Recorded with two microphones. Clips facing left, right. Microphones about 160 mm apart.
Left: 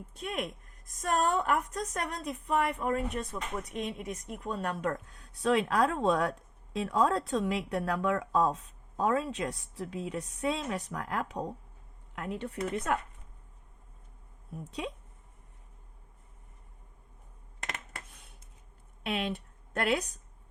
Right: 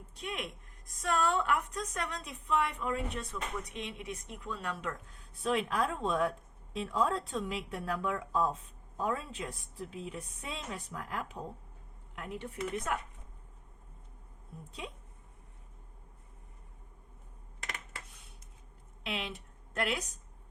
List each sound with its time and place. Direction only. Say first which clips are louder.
0.1 s a woman's voice: left 4 dB; 45° left (ahead or behind)
5.3 s a woman's voice: left 5 dB; 80° left; by 13.0 s 60° left (ahead or behind)
17.6 s a sound: left 3 dB; 55° left (ahead or behind)
19.0 s speech: left 6 dB; 55° left (ahead or behind)